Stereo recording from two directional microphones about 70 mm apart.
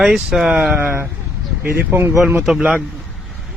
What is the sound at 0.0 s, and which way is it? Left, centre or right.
Speech, centre.